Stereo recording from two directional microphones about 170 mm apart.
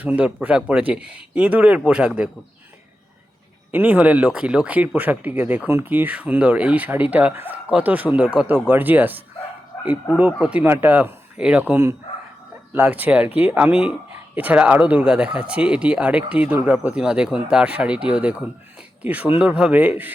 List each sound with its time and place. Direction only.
0.0 s speech: 5° right (ahead or behind)
3.7 s speech: 10° right (ahead or behind)
10.4 s speech: 10° right (ahead or behind)